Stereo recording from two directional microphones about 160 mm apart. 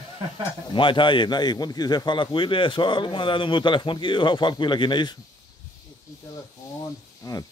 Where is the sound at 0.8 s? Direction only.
30° left (ahead or behind).